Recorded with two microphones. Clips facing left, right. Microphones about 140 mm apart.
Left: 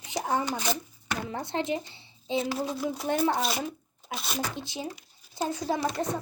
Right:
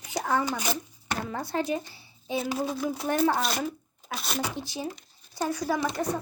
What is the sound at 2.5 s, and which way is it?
Speech, centre (ahead or behind).